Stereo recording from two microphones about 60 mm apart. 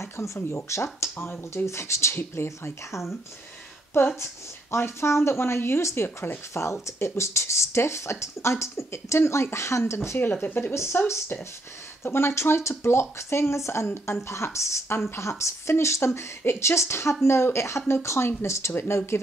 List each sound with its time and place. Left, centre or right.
0.0 s speech: left
2.1 s speech: left
4.2 s speech: left
10.7 s speech: left